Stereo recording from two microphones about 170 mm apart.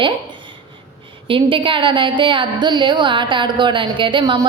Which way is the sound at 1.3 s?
30° right (ahead or behind).